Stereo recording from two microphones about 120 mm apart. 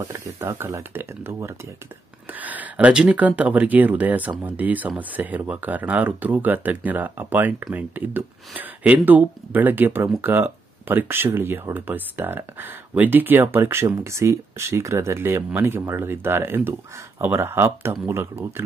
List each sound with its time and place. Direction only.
0.0 s speech: 25° right (ahead or behind)